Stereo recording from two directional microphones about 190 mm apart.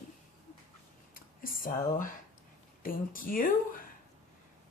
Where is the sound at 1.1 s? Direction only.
45° left (ahead or behind).